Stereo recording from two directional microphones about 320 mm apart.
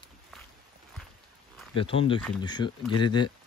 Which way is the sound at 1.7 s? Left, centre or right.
Centre.